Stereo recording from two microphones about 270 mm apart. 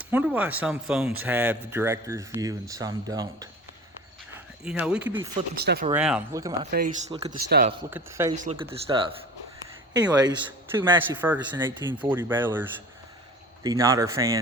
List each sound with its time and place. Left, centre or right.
0.0 s speech: centre
4.6 s speech: centre
5.5 s speech: right
5.9 s speech: centre
6.7 s speech: right
7.9 s speech: centre
8.7 s speech: centre